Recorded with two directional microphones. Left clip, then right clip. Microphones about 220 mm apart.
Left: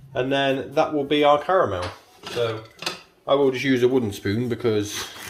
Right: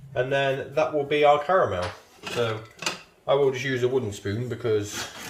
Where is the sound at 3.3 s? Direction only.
40° left (ahead or behind).